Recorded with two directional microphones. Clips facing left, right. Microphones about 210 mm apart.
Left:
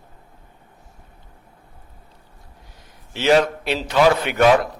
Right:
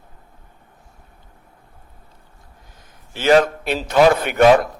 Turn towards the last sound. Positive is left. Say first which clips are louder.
# right 3 dB
turn(degrees=-50)  # may be behind; listen again after turning